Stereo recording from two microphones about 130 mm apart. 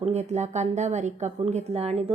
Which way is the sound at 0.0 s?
60° right (ahead or behind).